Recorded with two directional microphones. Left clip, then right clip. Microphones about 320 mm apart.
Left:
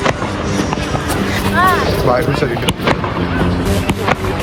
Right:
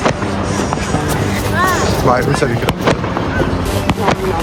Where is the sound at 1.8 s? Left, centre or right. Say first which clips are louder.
Right 1 dB; right.